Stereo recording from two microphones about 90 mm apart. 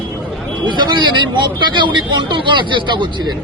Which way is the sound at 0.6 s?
60° right (ahead or behind).